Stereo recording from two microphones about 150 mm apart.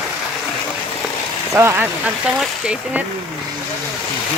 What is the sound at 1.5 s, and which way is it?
Speech, 15° right (ahead or behind).